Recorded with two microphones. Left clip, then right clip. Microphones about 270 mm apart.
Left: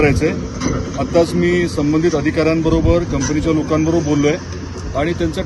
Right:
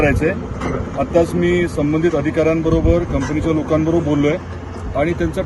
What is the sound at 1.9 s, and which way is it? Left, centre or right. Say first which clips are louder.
Speech: left 3 dB; centre.